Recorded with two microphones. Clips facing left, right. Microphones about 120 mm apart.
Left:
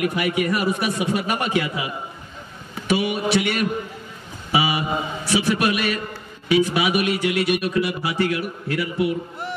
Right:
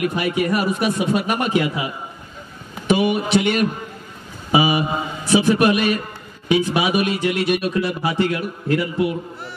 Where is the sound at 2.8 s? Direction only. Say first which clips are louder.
Right 3 dB; 20° right (ahead or behind).